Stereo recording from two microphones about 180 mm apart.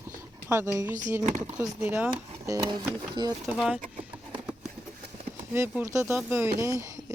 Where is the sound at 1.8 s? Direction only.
10° right (ahead or behind).